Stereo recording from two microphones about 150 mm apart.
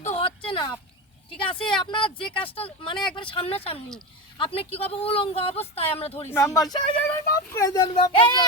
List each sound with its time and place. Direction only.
0.0 s a sound: 40° left (ahead or behind)
1.8 s a woman's voice: 35° left (ahead or behind)
2.1 s speech: 5° left (ahead or behind)
2.4 s a woman's voice: 35° left (ahead or behind)
6.3 s speech: 20° left (ahead or behind)